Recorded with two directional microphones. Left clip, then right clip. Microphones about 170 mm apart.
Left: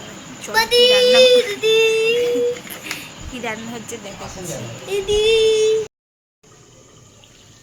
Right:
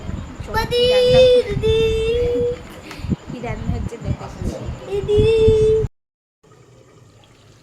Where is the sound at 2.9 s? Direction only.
Centre (ahead or behind).